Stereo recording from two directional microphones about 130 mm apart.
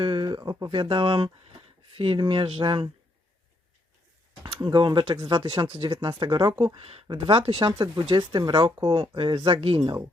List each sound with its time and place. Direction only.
0.0 s speech: 35° right (ahead or behind)
4.6 s speech: 35° right (ahead or behind)